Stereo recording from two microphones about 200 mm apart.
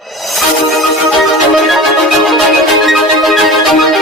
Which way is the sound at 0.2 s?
Centre (ahead or behind).